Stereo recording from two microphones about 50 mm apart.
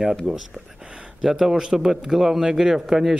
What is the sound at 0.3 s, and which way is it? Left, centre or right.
Speech, centre.